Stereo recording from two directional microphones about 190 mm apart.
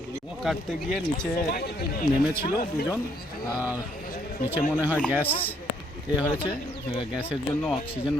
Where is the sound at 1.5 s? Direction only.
55° left (ahead or behind).